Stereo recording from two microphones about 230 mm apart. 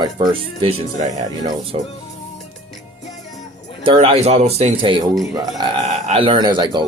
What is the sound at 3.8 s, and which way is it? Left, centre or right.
Speech, right.